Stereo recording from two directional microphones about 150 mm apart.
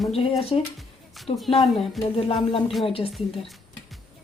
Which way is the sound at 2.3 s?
40° left (ahead or behind).